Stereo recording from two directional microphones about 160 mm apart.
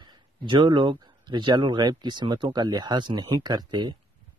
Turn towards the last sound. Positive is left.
turn(degrees=-25)  # may be behind; listen again after turning